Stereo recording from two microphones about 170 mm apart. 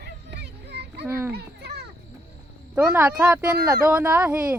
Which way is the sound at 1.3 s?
70° right (ahead or behind).